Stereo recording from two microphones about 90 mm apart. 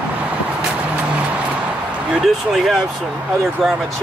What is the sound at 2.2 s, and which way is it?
Speech, centre (ahead or behind).